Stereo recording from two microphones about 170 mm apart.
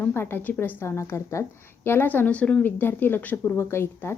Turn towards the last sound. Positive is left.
turn(degrees=15)  # may be behind; listen again after turning